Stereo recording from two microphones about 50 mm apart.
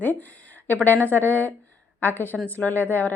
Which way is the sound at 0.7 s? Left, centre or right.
Left.